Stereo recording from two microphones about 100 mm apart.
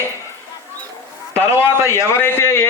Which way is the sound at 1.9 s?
25° left (ahead or behind).